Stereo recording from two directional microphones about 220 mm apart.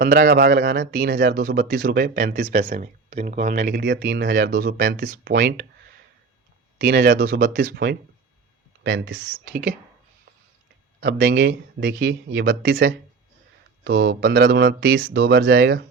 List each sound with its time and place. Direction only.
0.0 s speech: 45° right (ahead or behind)
6.7 s speech: 45° right (ahead or behind)
11.0 s speech: 45° right (ahead or behind)